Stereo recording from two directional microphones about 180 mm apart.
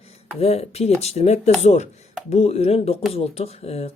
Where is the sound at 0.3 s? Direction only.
35° left (ahead or behind).